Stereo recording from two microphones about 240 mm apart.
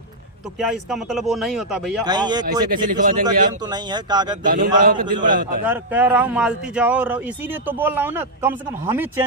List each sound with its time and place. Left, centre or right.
0.6 s speech: centre
2.0 s speech: centre
2.6 s speech: right
3.2 s speech: centre
4.4 s speech: right
5.6 s speech: centre